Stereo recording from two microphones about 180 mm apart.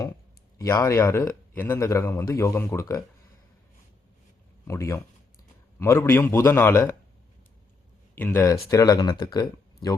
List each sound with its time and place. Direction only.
0.6 s speech: 20° left (ahead or behind)
4.6 s speech: 15° left (ahead or behind)
8.1 s speech: 10° left (ahead or behind)